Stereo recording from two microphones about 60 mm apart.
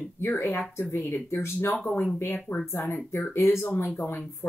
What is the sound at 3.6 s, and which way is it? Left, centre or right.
Speech, left.